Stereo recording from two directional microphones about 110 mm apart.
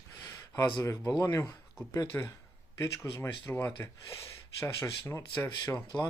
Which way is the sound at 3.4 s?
20° left (ahead or behind).